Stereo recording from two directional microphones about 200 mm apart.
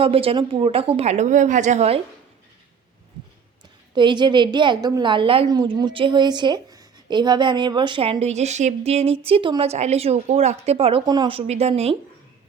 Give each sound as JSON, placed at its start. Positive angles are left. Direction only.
{"t": 0.0, "sound": "a woman's voice", "side_deg": -30}
{"t": 3.9, "sound": "a woman's voice", "side_deg": -20}